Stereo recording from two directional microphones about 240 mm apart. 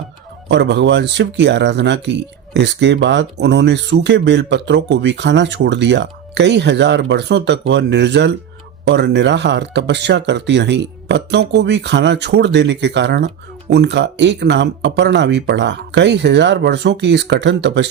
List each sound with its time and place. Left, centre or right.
0.4 s speech: right